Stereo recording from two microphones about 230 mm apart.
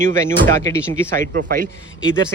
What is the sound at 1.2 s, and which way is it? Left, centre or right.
Speech, right.